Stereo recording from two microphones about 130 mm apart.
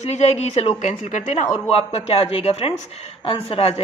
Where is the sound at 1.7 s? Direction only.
50° left (ahead or behind).